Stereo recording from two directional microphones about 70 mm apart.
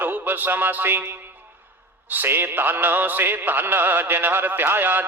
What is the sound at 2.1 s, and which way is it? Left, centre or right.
Music, right.